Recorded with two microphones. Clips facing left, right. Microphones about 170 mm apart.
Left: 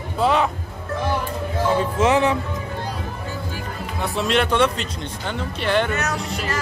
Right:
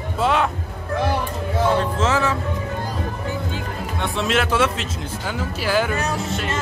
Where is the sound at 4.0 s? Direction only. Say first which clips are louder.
Left 1 dB; centre (ahead or behind).